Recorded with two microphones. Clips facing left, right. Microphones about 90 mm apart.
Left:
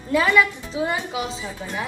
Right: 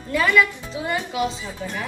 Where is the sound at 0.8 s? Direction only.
25° left (ahead or behind).